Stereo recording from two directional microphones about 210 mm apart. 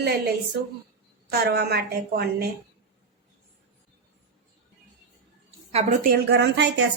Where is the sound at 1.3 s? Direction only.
50° right (ahead or behind).